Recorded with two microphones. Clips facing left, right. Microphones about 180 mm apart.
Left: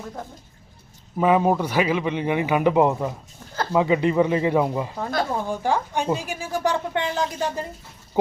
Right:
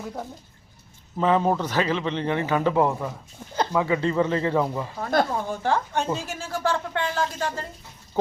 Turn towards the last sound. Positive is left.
turn(degrees=15)  # may be behind; listen again after turning